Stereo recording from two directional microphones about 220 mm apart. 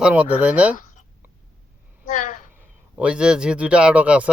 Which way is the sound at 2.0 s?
35° left (ahead or behind).